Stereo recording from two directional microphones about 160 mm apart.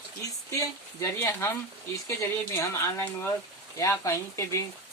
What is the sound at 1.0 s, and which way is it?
Speech, 15° left (ahead or behind).